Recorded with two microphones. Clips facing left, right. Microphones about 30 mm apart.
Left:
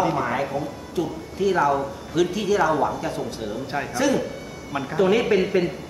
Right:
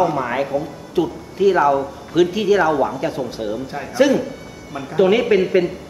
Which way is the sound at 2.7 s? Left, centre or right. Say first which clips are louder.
Right 4 dB; centre.